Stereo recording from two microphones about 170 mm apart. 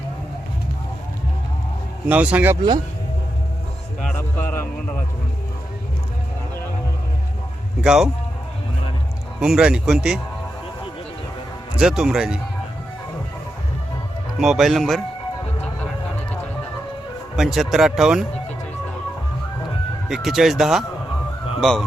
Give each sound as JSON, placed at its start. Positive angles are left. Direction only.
{"t": 2.0, "sound": "a man's voice", "side_deg": -10}
{"t": 2.6, "sound": "speech", "side_deg": -25}
{"t": 4.0, "sound": "a man's voice", "side_deg": 10}
{"t": 7.8, "sound": "speech", "side_deg": -5}
{"t": 9.4, "sound": "speech", "side_deg": -5}
{"t": 11.8, "sound": "speech", "side_deg": -5}
{"t": 14.3, "sound": "speech", "side_deg": 0}
{"t": 17.3, "sound": "speech", "side_deg": 0}
{"t": 20.1, "sound": "speech", "side_deg": 0}